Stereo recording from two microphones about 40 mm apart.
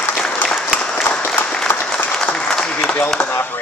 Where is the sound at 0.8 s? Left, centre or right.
Left.